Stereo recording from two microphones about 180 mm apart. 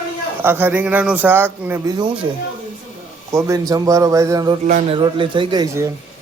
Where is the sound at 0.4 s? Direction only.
10° right (ahead or behind).